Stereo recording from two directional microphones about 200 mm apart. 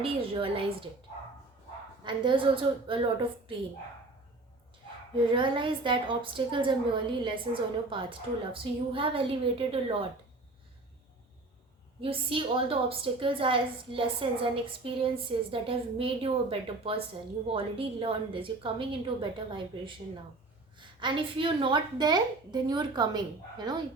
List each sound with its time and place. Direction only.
0.0 s a woman's voice: 30° right (ahead or behind)
2.0 s a woman's voice: 25° right (ahead or behind)
5.3 s a woman's voice: 25° right (ahead or behind)
12.0 s a woman's voice: 25° right (ahead or behind)